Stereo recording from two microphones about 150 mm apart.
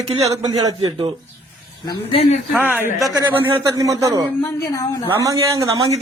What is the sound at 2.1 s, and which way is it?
Speech, 40° left (ahead or behind).